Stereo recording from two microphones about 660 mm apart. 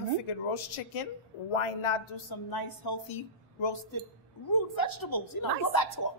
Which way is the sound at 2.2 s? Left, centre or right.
Left.